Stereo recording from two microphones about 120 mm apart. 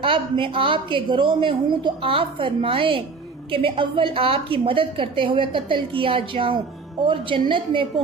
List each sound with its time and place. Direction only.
0.0 s a woman's voice: 45° right (ahead or behind)